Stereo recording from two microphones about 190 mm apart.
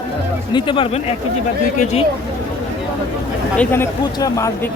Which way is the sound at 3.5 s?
10° left (ahead or behind).